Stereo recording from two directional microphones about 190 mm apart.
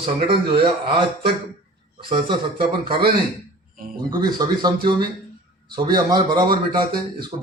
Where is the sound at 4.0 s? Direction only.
20° right (ahead or behind).